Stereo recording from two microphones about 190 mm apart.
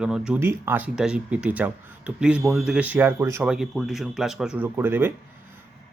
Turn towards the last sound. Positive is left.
turn(degrees=-10)  # may be behind; listen again after turning